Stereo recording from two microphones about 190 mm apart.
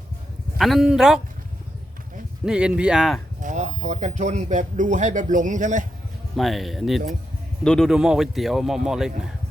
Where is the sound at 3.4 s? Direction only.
40° right (ahead or behind).